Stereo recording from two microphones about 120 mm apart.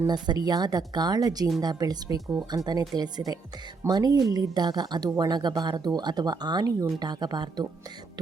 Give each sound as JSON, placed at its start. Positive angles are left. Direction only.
{"t": 0.1, "sound": "speech", "side_deg": -35}